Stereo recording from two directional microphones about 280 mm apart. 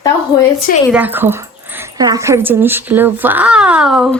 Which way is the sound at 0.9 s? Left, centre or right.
Centre.